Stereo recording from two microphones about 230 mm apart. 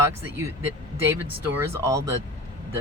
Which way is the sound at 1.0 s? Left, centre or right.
Centre.